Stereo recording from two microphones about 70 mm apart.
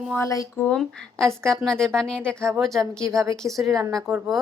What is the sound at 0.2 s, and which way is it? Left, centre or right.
Speech, left.